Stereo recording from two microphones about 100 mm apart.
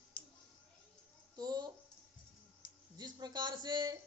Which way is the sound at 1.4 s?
40° right (ahead or behind).